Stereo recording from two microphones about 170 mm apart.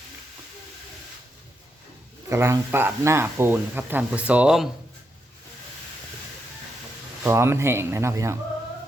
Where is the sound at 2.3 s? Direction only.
15° right (ahead or behind).